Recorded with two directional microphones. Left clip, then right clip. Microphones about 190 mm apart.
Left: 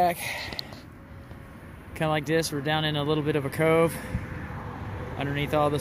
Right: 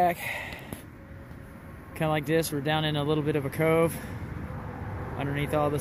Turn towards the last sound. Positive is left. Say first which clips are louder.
# left 2 dB
turn(degrees=10)  # may be behind; listen again after turning